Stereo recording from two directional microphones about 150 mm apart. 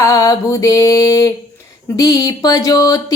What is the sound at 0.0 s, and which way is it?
Mantra, 25° left (ahead or behind).